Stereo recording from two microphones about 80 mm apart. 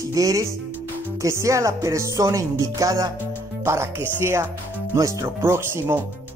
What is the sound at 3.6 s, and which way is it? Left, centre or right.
Speech, right.